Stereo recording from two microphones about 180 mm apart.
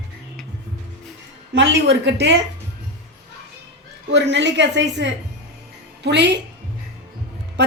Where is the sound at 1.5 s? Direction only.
85° right.